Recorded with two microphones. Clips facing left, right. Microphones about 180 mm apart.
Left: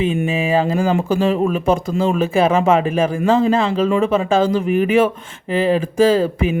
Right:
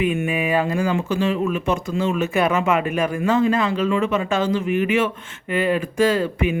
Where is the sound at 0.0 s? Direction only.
25° left (ahead or behind).